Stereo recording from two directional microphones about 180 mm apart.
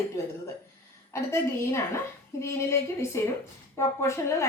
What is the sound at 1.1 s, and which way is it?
A woman's voice, 15° left (ahead or behind).